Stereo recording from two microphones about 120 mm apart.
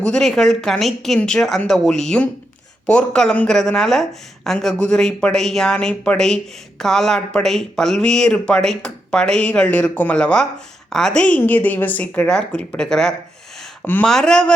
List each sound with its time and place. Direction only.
0.0 s a woman's voice: 5° left (ahead or behind)
13.8 s a woman's voice: 15° left (ahead or behind)
14.1 s speech: 5° left (ahead or behind)